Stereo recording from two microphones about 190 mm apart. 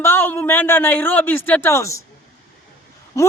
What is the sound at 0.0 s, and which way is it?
A man's voice, 10° left (ahead or behind).